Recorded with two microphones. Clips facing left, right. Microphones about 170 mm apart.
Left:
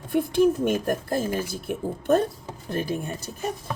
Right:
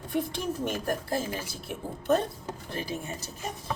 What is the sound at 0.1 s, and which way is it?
Speech, 55° left (ahead or behind).